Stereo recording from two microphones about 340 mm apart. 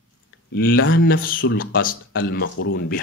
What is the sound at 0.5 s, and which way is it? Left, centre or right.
Speech, left.